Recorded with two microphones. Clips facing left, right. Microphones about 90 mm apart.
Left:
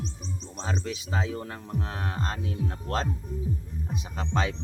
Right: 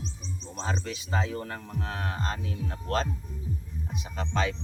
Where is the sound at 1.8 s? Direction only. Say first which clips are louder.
Left 1 dB; 25° left (ahead or behind).